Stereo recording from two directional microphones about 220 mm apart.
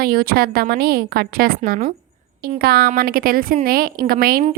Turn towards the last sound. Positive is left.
turn(degrees=-40)  # may be behind; listen again after turning